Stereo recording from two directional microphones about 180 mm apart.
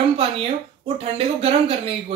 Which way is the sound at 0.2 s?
30° right (ahead or behind).